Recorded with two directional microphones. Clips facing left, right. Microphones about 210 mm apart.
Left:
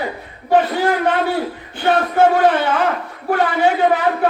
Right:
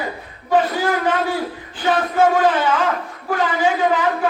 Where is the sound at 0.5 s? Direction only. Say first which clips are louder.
Left 2 dB; 60° left (ahead or behind).